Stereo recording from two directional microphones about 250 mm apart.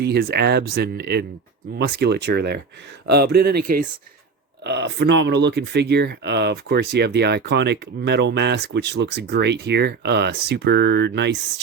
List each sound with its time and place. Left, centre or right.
0.0 s speech: right
4.6 s speech: right